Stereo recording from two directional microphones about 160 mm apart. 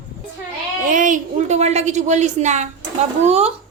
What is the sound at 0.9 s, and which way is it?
A woman's voice, 55° right (ahead or behind).